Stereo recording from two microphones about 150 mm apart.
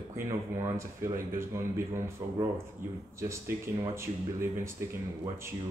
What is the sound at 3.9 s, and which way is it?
Speech, 20° right (ahead or behind).